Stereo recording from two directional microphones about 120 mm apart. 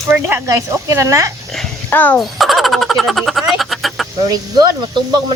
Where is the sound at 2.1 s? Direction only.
Centre (ahead or behind).